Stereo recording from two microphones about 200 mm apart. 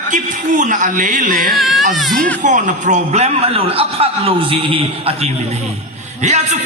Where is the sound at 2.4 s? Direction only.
40° right (ahead or behind).